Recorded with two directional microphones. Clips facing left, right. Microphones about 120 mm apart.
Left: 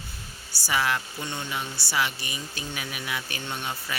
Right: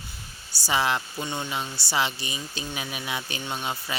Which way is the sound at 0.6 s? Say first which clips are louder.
Right 2 dB; 25° right (ahead or behind).